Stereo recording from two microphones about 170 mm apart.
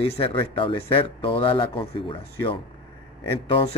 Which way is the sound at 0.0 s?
35° left (ahead or behind).